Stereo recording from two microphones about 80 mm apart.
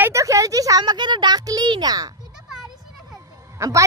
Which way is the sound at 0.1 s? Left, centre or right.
Right.